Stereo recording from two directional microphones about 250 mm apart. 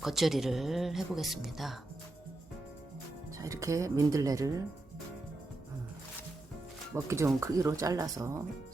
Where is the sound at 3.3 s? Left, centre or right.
Centre.